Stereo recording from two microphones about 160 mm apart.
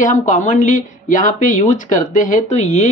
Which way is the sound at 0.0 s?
50° left (ahead or behind).